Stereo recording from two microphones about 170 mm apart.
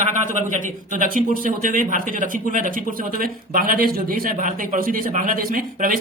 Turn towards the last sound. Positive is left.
turn(degrees=-55)  # may be behind; listen again after turning